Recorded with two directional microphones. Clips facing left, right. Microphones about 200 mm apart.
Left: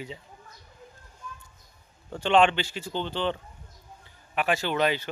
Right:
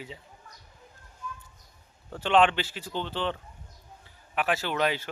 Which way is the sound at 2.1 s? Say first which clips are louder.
Left 1 dB; centre (ahead or behind).